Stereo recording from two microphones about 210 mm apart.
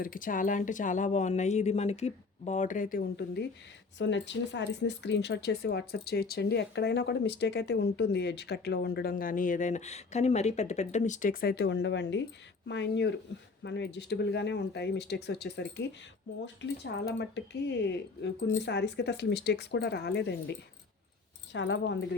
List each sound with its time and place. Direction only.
0.0 s speech: 40° left (ahead or behind); by 21.9 s 60° left (ahead or behind)